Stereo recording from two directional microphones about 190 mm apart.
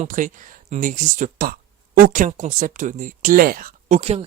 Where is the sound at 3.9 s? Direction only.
35° right (ahead or behind).